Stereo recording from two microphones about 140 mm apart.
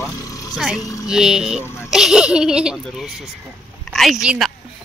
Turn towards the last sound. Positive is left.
turn(degrees=-5)  # may be behind; listen again after turning